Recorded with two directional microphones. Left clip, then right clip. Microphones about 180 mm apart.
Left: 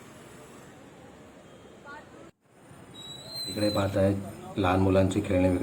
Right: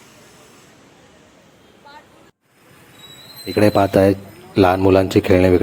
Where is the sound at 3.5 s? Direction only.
60° right (ahead or behind).